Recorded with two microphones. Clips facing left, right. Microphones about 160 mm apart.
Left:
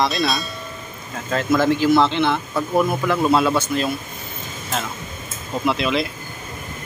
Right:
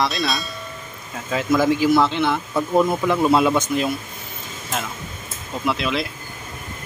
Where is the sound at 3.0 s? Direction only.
15° right (ahead or behind).